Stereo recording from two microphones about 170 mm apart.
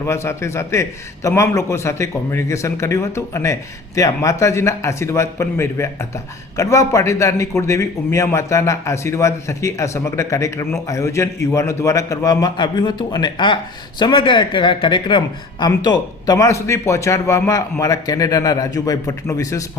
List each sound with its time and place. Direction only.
0.0 s a man's voice: 15° left (ahead or behind)